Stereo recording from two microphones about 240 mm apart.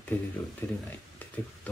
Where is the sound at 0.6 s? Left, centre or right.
Centre.